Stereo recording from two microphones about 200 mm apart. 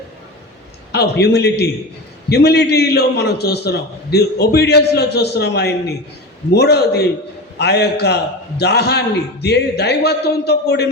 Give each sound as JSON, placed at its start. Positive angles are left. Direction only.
{"t": 0.9, "sound": "a man's voice", "side_deg": 55}